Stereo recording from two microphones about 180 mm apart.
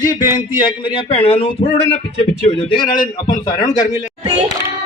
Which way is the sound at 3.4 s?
20° left (ahead or behind).